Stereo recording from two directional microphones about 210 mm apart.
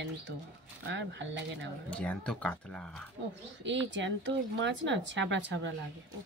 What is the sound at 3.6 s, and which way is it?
Speech, 60° right (ahead or behind).